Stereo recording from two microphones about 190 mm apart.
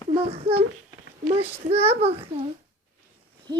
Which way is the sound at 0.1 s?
30° right (ahead or behind).